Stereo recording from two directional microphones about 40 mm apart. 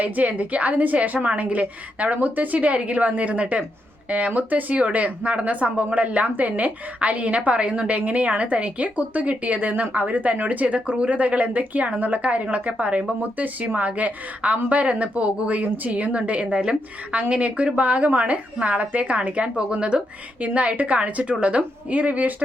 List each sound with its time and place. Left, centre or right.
0.0 s speech: right
15.5 s a woman's voice: right
15.9 s speech: right